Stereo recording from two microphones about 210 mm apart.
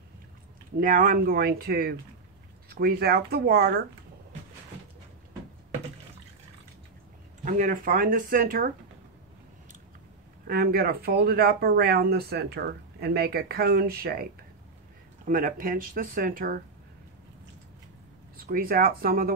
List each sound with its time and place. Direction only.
0.7 s speech: 40° right (ahead or behind)
7.4 s speech: 40° right (ahead or behind)
10.4 s speech: 45° right (ahead or behind)
15.2 s speech: 40° right (ahead or behind)
18.4 s speech: 45° right (ahead or behind)